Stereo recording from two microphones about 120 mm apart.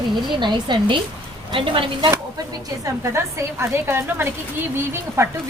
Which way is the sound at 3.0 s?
20° right (ahead or behind).